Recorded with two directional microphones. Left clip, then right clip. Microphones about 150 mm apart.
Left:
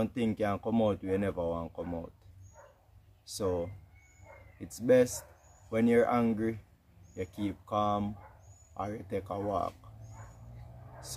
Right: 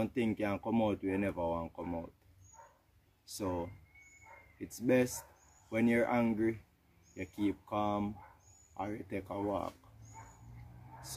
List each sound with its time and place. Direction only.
0.0 s speech: 15° left (ahead or behind)
4.8 s speech: 15° left (ahead or behind)